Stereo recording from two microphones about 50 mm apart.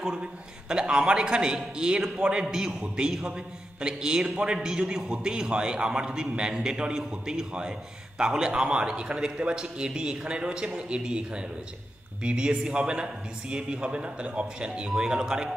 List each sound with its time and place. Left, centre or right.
0.1 s a man's voice: centre